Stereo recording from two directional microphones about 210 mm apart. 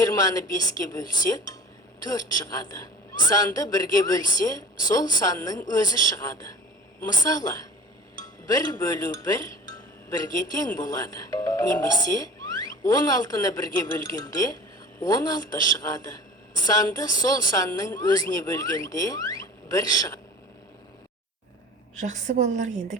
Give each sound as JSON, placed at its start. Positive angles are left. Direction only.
{"t": 0.0, "sound": "a man's voice", "side_deg": 15}
{"t": 22.0, "sound": "a woman's voice", "side_deg": -35}